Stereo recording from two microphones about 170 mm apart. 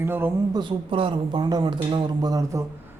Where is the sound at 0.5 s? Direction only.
30° right (ahead or behind).